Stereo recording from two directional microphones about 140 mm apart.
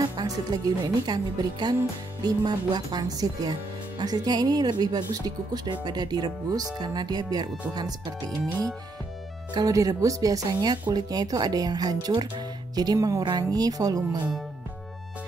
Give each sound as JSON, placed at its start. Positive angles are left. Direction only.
{"t": 0.2, "sound": "speech", "side_deg": -30}
{"t": 9.5, "sound": "speech", "side_deg": -25}